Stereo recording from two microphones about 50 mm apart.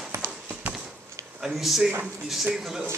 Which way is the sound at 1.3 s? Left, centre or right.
Centre.